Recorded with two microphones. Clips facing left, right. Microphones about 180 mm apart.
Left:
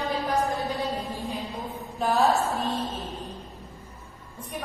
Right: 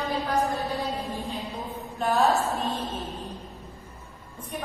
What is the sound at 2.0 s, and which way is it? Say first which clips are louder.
Mantra: even; centre (ahead or behind).